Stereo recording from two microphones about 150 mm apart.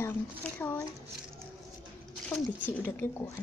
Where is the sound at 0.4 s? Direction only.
15° left (ahead or behind).